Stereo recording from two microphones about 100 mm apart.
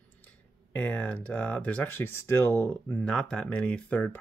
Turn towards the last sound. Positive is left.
turn(degrees=15)  # may be behind; listen again after turning